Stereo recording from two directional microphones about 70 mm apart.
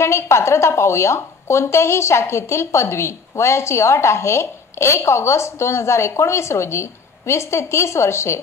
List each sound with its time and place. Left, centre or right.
0.0 s a woman's voice: left